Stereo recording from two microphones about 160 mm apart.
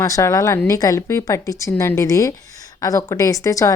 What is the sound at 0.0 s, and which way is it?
Speech, 20° left (ahead or behind).